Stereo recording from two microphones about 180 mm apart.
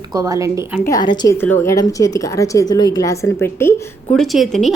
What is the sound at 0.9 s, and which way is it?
A woman's voice, 25° left (ahead or behind).